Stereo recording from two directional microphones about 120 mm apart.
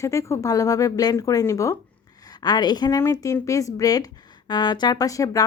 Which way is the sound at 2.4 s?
35° left (ahead or behind).